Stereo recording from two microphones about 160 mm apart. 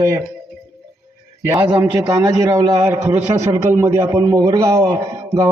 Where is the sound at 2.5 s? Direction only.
20° right (ahead or behind).